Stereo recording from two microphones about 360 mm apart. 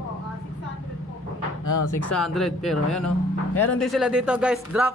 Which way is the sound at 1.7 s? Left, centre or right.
Left.